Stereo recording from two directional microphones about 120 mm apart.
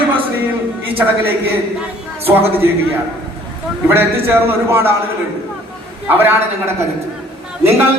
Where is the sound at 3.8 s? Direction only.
20° right (ahead or behind).